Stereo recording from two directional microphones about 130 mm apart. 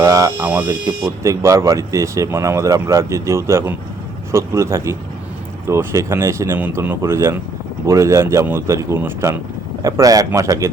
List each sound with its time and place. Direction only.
0.0 s speech: 25° right (ahead or behind)